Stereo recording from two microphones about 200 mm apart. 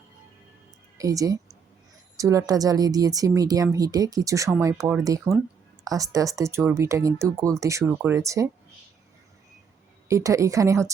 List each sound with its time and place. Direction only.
0.9 s a woman's voice: 15° right (ahead or behind)
10.1 s speech: 15° right (ahead or behind)